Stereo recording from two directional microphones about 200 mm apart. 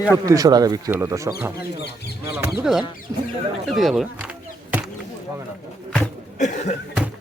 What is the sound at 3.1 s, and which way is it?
Speech, 20° right (ahead or behind).